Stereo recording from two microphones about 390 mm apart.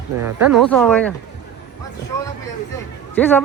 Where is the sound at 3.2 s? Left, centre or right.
Centre.